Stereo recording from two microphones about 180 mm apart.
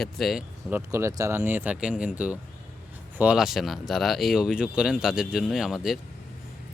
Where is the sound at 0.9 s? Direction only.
15° right (ahead or behind).